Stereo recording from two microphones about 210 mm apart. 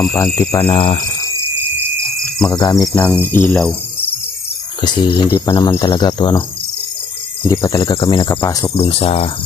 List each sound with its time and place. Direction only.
0.0 s speech: 10° left (ahead or behind)
0.7 s speech: 25° left (ahead or behind)
2.5 s speech: 15° left (ahead or behind)
4.8 s speech: 20° left (ahead or behind)
7.4 s speech: 15° left (ahead or behind)
8.7 s speech: 30° left (ahead or behind)